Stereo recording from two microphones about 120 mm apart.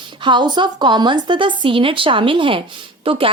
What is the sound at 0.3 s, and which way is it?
A woman's voice, 40° right (ahead or behind).